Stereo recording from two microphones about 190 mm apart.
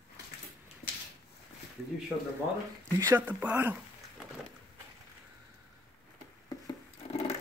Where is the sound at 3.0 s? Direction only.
10° right (ahead or behind).